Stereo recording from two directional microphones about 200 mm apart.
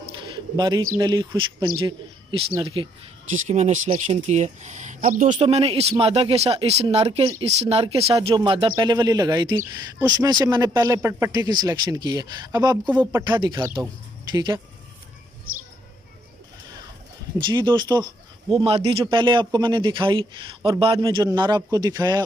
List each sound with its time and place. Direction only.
0.6 s speech: 20° right (ahead or behind)
1.8 s a sound: 25° right (ahead or behind)
2.6 s speech: 25° right (ahead or behind)
3.3 s speech: 35° right (ahead or behind); by 14.6 s 20° right (ahead or behind)
17.5 s speech: 25° right (ahead or behind)